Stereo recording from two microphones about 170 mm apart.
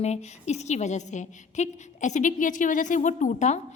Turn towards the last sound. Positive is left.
turn(degrees=45)  # may be behind; listen again after turning